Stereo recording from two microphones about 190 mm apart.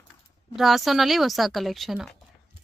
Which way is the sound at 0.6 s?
Centre (ahead or behind).